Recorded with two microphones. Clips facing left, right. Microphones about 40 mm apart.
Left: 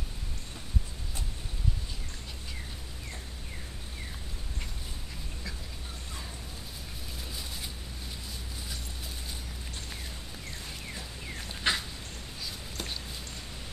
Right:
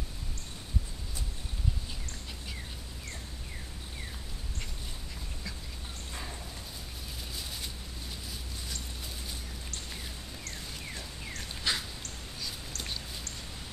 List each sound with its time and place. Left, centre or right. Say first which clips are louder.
11.7 s dog: left 3 dB; left